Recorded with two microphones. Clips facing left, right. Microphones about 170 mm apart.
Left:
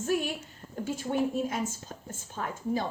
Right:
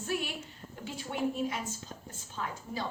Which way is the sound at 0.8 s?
45° left (ahead or behind).